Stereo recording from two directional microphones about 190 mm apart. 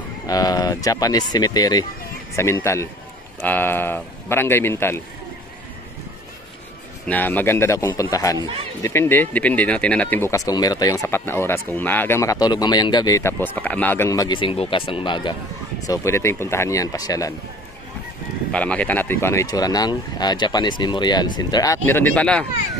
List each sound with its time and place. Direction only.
0.3 s speech: 20° left (ahead or behind)
7.1 s speech: 10° left (ahead or behind); by 15.3 s 25° left (ahead or behind)
15.9 s speech: 15° left (ahead or behind)
18.5 s speech: 5° left (ahead or behind)